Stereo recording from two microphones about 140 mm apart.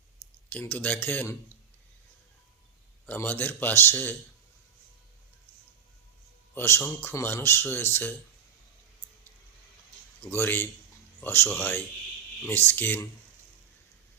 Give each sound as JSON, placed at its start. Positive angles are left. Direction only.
{"t": 0.5, "sound": "speech", "side_deg": 10}
{"t": 3.1, "sound": "speech", "side_deg": 15}
{"t": 6.5, "sound": "speech", "side_deg": 15}
{"t": 10.3, "sound": "speech", "side_deg": 15}